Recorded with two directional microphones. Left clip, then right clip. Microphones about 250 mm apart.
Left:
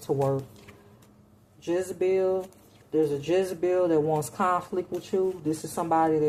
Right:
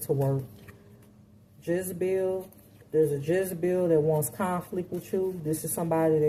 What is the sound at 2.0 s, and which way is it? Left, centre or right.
Speech, centre.